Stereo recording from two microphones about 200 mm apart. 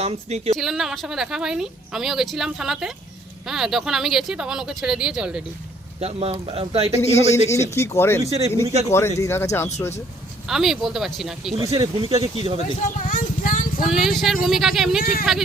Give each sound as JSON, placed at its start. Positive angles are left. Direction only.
{"t": 0.0, "sound": "a woman's voice", "side_deg": -30}
{"t": 0.5, "sound": "speech", "side_deg": 0}
{"t": 6.0, "sound": "speech", "side_deg": -30}
{"t": 7.1, "sound": "speech", "side_deg": 35}
{"t": 7.7, "sound": "speech", "side_deg": 15}
{"t": 8.3, "sound": "a woman's voice", "side_deg": -30}
{"t": 8.9, "sound": "speech", "side_deg": 15}
{"t": 10.4, "sound": "speech", "side_deg": 0}
{"t": 11.6, "sound": "speech", "side_deg": -20}
{"t": 13.0, "sound": "a sound", "side_deg": 45}
{"t": 13.8, "sound": "speech", "side_deg": 0}